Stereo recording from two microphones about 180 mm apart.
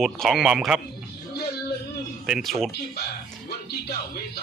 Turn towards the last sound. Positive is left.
turn(degrees=60)  # may be behind; listen again after turning